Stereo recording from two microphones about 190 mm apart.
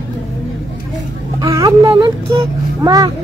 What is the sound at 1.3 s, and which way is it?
A child's voice, 15° right (ahead or behind).